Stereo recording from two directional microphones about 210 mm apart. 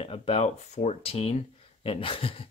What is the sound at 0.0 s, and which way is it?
Speech, 25° left (ahead or behind).